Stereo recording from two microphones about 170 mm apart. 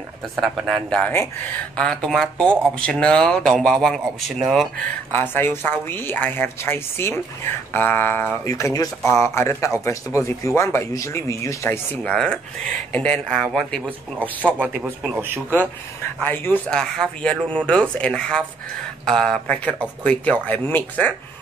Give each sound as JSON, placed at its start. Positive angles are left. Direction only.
{"t": 0.4, "sound": "speech", "side_deg": 0}
{"t": 5.1, "sound": "speech", "side_deg": 10}
{"t": 16.2, "sound": "speech", "side_deg": 10}